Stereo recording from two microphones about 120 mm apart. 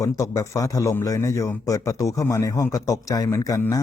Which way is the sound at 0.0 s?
30° left (ahead or behind).